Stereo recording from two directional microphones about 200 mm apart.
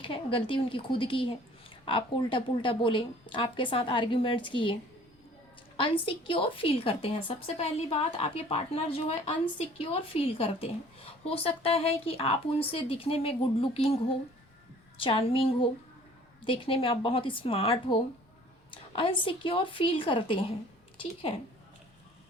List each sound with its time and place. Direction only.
0.0 s a woman's voice: 25° left (ahead or behind)